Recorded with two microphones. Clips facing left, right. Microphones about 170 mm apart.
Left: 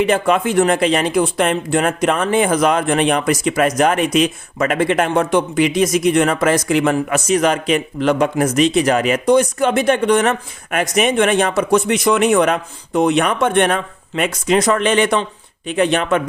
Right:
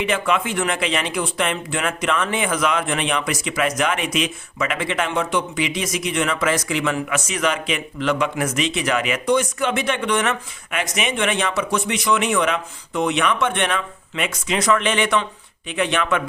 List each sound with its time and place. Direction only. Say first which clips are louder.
0.0 s speech: left 6 dB; 40° left (ahead or behind)